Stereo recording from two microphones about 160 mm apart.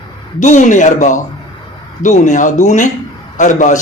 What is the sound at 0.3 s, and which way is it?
Speech, 50° left (ahead or behind).